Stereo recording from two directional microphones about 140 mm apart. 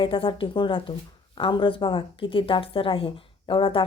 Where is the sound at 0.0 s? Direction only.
40° left (ahead or behind).